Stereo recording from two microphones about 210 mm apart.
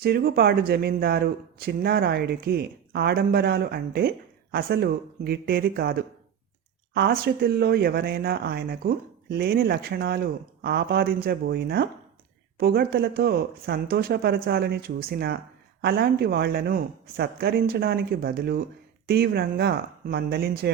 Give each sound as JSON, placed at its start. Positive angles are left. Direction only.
{"t": 0.0, "sound": "speech", "side_deg": -45}